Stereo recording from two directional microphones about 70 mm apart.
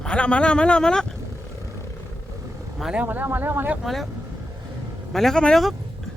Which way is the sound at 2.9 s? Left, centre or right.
Right.